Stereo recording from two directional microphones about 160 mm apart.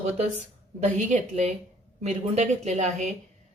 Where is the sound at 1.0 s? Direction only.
50° right (ahead or behind).